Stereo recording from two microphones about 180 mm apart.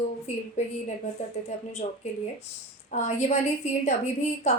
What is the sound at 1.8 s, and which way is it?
A woman's voice, 30° left (ahead or behind).